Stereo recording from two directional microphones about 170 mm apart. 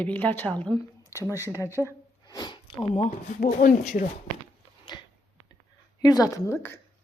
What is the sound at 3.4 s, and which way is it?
Speech, 55° left (ahead or behind).